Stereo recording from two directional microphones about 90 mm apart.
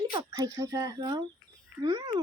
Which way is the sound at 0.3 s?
40° right (ahead or behind).